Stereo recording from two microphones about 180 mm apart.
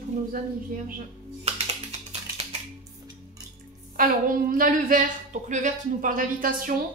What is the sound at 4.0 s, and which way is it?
Speech, 50° right (ahead or behind).